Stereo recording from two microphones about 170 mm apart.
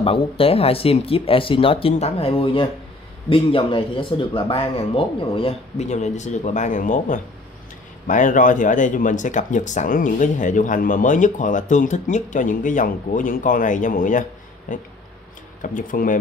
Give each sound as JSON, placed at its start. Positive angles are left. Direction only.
{"t": 0.0, "sound": "speech", "side_deg": 35}